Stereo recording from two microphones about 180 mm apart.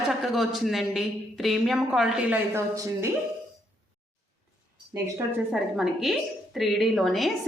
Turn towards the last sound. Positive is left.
turn(degrees=0)  # may be behind; listen again after turning